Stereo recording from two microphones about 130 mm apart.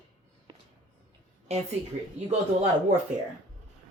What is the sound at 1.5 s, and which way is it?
Speech, 55° right (ahead or behind).